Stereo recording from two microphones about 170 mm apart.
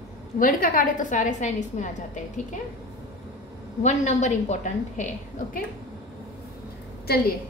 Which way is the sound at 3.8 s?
45° left (ahead or behind).